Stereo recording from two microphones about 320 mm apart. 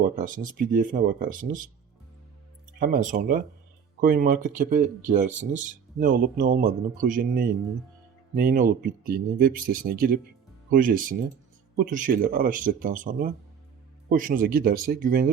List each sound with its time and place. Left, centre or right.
0.2 s speech: right
2.7 s speech: right